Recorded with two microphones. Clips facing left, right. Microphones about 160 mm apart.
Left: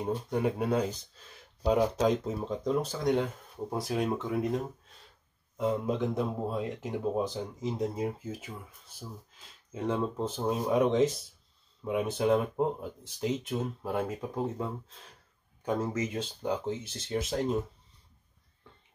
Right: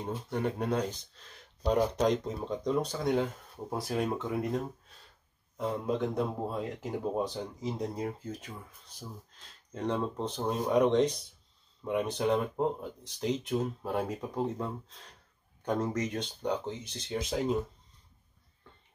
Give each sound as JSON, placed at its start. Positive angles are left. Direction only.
{"t": 0.0, "sound": "speech", "side_deg": 10}
{"t": 5.6, "sound": "speech", "side_deg": 0}